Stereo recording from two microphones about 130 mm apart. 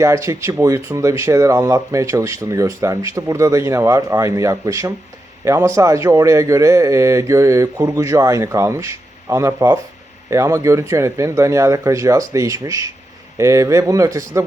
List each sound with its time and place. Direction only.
0.0 s speech: 20° right (ahead or behind)